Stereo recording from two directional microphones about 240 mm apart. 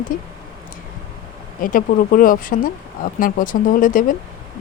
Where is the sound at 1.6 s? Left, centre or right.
Left.